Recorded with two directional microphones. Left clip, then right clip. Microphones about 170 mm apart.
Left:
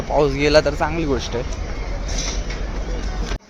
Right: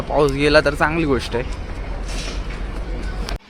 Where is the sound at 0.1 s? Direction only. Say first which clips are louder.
Even; 15° right (ahead or behind).